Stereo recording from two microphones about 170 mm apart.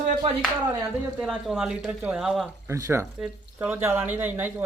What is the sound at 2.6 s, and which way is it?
Speech, 15° right (ahead or behind).